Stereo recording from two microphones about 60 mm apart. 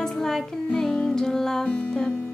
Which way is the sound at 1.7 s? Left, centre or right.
Centre.